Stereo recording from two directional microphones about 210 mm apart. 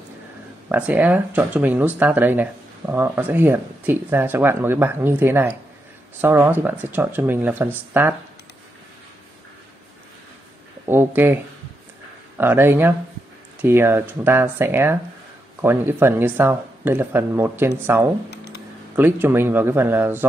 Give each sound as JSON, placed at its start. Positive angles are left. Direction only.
{"t": 0.7, "sound": "speech", "side_deg": -5}
{"t": 10.9, "sound": "speech", "side_deg": -10}
{"t": 12.4, "sound": "speech", "side_deg": -10}
{"t": 18.3, "sound": "a sound", "side_deg": 50}
{"t": 18.9, "sound": "speech", "side_deg": -10}